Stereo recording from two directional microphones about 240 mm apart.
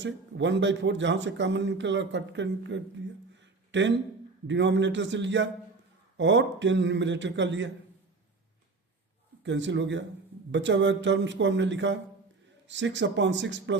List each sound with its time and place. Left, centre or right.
0.0 s a man's voice: right
3.4 s a sound: right
4.4 s a man's voice: right
9.4 s a man's voice: right